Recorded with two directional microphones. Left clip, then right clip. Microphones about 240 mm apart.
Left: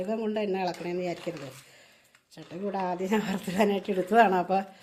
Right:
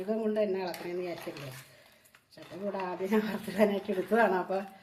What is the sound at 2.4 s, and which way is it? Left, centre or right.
Speech, left.